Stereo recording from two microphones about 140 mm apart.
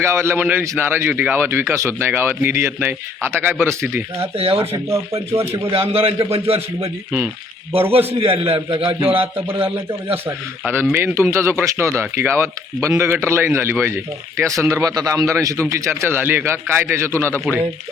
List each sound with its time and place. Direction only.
0.0 s a man's voice: 20° right (ahead or behind)
4.4 s a man's voice: 45° right (ahead or behind)
5.3 s speech: 20° right (ahead or behind)
5.7 s a man's voice: 45° right (ahead or behind)
10.2 s a man's voice: 15° right (ahead or behind)